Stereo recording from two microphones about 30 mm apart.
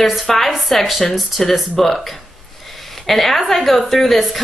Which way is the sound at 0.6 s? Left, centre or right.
Centre.